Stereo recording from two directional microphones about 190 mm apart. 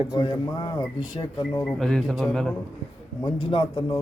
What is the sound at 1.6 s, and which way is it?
Speech, centre (ahead or behind).